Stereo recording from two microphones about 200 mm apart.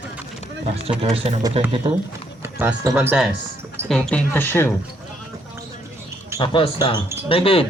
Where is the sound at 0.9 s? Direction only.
30° right (ahead or behind).